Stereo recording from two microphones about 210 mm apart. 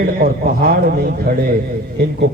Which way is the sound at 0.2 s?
45° right (ahead or behind).